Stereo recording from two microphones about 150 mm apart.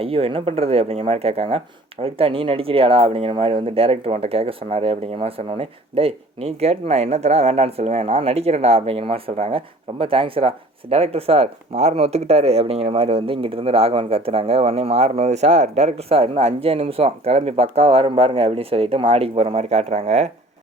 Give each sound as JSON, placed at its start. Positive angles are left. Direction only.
{"t": 0.0, "sound": "speech", "side_deg": -40}